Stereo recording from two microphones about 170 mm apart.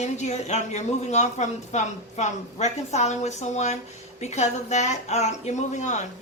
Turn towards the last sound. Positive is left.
turn(degrees=45)  # may be behind; listen again after turning